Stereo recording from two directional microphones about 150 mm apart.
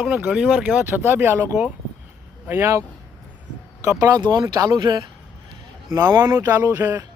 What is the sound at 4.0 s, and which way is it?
Speech, 25° right (ahead or behind).